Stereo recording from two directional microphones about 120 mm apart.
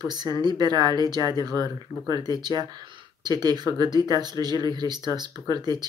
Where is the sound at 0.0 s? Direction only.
35° right (ahead or behind).